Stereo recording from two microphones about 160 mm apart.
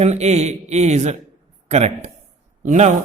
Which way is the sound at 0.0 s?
45° right (ahead or behind).